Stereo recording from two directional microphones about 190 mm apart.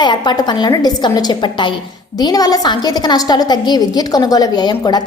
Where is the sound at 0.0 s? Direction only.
25° left (ahead or behind).